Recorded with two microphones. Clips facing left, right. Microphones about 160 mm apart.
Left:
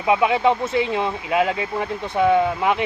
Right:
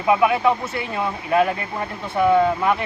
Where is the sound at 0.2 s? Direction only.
20° left (ahead or behind).